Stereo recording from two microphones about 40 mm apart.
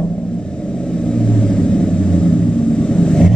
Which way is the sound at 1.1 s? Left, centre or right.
Centre.